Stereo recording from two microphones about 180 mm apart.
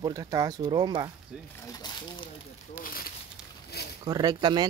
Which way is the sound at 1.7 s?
25° left (ahead or behind).